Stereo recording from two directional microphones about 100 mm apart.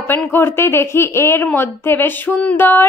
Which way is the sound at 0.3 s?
20° left (ahead or behind).